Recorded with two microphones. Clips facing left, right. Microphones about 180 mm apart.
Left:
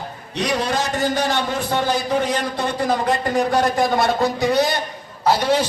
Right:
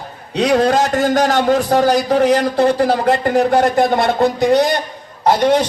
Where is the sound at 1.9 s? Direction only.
80° right.